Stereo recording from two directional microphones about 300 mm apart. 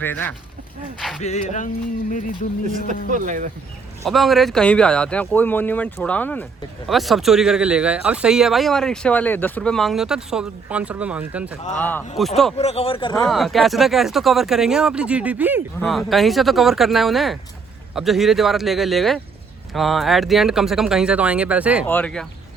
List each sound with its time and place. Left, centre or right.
0.0 s speech: centre
1.2 s a sound: left
2.8 s speech: right
4.0 s speech: centre
12.5 s a sound: centre
13.2 s speech: centre